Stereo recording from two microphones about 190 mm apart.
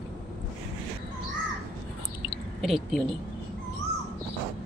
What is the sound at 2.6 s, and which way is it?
Speech, centre (ahead or behind).